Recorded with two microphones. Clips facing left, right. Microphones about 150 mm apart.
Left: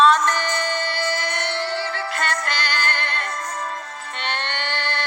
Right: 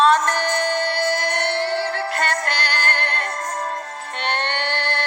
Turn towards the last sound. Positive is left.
turn(degrees=-55)  # may be behind; listen again after turning